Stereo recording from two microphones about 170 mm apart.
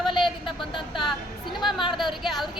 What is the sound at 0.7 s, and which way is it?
Speech, 30° left (ahead or behind).